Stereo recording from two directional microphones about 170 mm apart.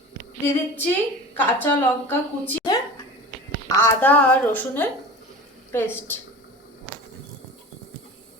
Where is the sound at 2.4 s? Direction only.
20° left (ahead or behind).